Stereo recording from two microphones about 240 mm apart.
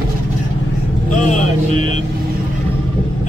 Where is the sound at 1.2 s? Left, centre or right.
Left.